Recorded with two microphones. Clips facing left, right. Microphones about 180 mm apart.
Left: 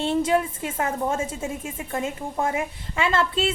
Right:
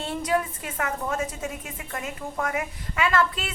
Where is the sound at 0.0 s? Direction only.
25° left (ahead or behind).